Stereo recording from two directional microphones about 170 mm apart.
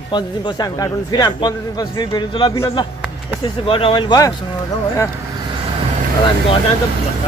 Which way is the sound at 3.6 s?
30° left (ahead or behind).